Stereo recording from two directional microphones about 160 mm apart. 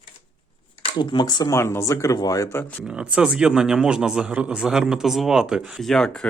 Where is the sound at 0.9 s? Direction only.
30° left (ahead or behind); by 2.8 s 10° left (ahead or behind).